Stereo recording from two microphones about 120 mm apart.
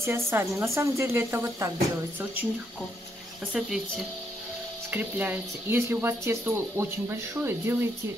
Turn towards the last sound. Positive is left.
turn(degrees=-20)  # may be behind; listen again after turning